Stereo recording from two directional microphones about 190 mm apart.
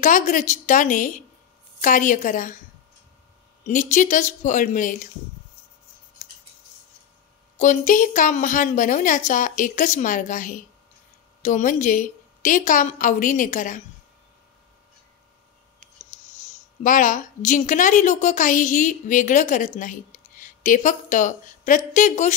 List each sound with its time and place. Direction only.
0.0 s a woman's voice: 40° left (ahead or behind)
3.6 s speech: 40° left (ahead or behind)
7.5 s a woman's voice: 40° left (ahead or behind)
16.0 s a woman's voice: 40° left (ahead or behind)